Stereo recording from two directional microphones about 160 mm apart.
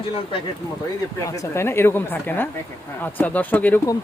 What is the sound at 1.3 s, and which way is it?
Speech, 15° left (ahead or behind).